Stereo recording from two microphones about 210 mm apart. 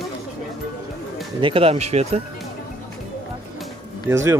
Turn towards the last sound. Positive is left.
turn(degrees=-10)  # may be behind; listen again after turning